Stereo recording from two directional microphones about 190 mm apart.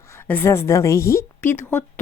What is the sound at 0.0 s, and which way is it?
A woman's voice, 15° left (ahead or behind).